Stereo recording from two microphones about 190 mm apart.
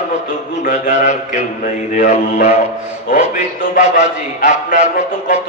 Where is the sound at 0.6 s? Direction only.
40° left (ahead or behind).